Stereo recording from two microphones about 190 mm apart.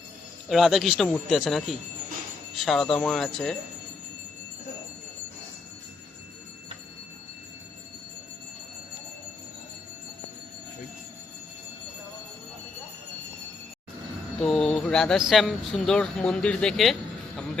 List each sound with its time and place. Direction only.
0.4 s speech: centre (ahead or behind)
14.3 s a sound: centre (ahead or behind)
15.3 s speech: centre (ahead or behind)